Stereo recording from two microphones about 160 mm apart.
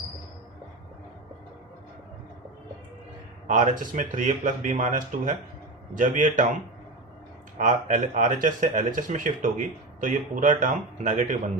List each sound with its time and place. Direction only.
3.4 s a man's voice: 50° right (ahead or behind)
7.6 s speech: 50° right (ahead or behind)